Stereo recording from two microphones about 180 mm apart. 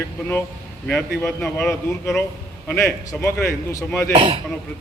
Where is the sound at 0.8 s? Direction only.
Centre (ahead or behind).